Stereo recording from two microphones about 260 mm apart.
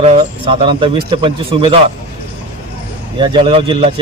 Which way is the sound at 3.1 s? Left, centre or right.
Centre.